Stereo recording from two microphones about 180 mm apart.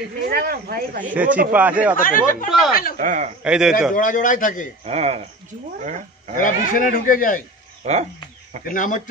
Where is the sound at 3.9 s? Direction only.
50° left (ahead or behind).